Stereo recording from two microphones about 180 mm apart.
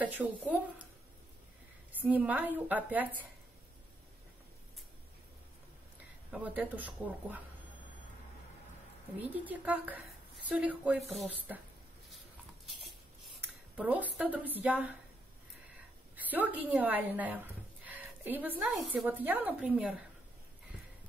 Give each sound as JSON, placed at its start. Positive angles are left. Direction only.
{"t": 0.0, "sound": "a woman's voice", "side_deg": -10}
{"t": 1.9, "sound": "a woman's voice", "side_deg": -10}
{"t": 6.3, "sound": "a woman's voice", "side_deg": -5}
{"t": 9.2, "sound": "a woman's voice", "side_deg": -10}
{"t": 13.2, "sound": "speech", "side_deg": -5}
{"t": 16.2, "sound": "a woman's voice", "side_deg": -10}